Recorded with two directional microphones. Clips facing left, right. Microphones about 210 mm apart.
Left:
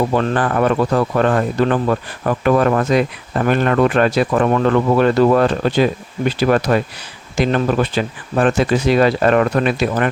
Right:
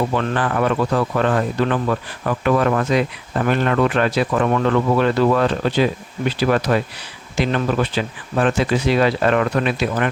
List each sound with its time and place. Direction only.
0.1 s speech: 40° left (ahead or behind)